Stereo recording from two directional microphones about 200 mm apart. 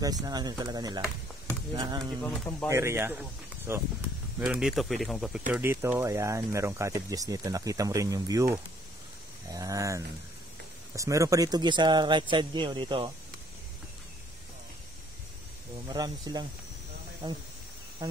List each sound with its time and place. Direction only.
0.0 s a man's voice: 20° right (ahead or behind)
2.3 s speech: 5° left (ahead or behind)
2.7 s speech: 15° right (ahead or behind)
5.5 s a man's voice: 10° right (ahead or behind)
15.9 s a man's voice: 20° right (ahead or behind)